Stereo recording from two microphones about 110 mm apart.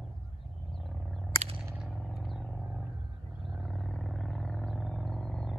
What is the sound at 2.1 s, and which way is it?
Vehicle, centre (ahead or behind).